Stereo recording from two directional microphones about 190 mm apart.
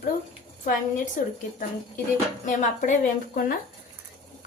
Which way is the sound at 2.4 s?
40° left (ahead or behind).